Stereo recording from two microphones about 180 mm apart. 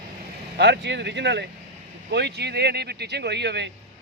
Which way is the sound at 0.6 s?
75° right (ahead or behind).